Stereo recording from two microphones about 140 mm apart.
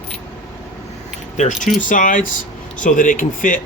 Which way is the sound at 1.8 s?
70° left (ahead or behind).